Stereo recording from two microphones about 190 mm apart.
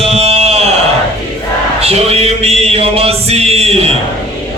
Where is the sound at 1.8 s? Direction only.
35° right (ahead or behind).